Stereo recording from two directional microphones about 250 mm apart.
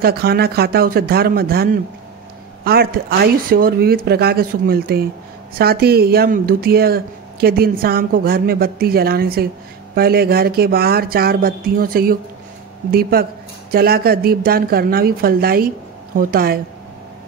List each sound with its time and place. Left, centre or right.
0.0 s speech: right